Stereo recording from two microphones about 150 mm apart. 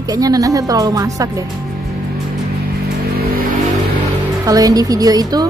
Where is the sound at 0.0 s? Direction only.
25° right (ahead or behind).